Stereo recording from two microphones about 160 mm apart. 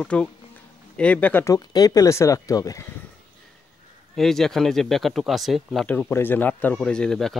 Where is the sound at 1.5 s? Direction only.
25° left (ahead or behind).